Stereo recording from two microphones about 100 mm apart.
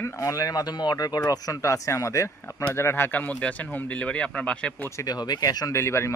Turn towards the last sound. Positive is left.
turn(degrees=25)  # may be behind; listen again after turning